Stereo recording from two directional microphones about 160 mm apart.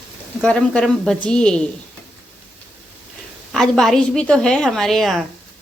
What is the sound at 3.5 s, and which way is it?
A woman's voice, 5° left (ahead or behind).